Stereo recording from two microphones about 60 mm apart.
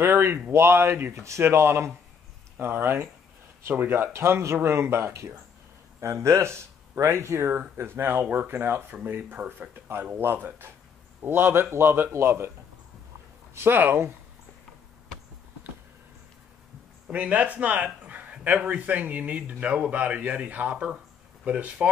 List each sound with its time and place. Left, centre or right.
0.0 s speech: right
1.1 s speech: right
13.6 s speech: right
17.1 s speech: right